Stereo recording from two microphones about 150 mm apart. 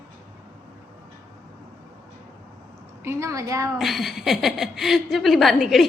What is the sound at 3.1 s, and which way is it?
Speech, 20° right (ahead or behind).